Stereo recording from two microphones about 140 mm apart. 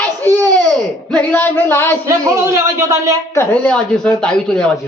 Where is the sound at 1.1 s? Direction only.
10° left (ahead or behind).